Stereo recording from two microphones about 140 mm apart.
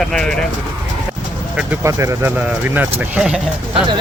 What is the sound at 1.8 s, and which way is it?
Speech, 20° right (ahead or behind).